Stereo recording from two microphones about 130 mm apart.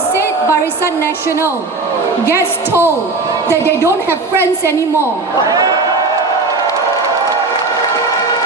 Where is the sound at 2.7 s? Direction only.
15° right (ahead or behind).